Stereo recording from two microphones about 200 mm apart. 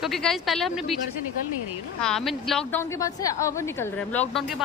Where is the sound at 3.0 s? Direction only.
15° left (ahead or behind).